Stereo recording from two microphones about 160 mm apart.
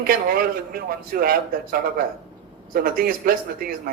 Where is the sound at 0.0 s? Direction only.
65° right (ahead or behind).